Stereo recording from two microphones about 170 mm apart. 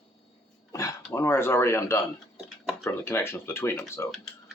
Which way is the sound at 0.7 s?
20° left (ahead or behind).